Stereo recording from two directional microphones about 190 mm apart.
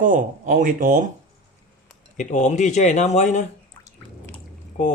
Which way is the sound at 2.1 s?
40° left (ahead or behind).